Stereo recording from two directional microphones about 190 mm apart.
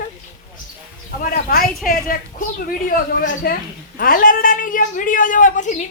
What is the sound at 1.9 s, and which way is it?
A woman's voice, 45° left (ahead or behind).